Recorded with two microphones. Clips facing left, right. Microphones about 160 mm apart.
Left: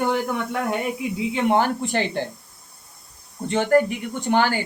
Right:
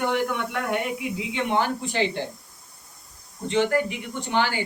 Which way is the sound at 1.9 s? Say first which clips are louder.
Left 1 dB; 50° left (ahead or behind).